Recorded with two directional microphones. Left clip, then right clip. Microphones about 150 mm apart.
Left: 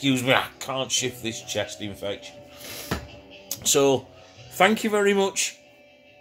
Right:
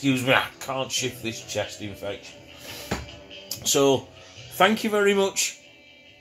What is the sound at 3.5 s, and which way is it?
Speech, 25° left (ahead or behind).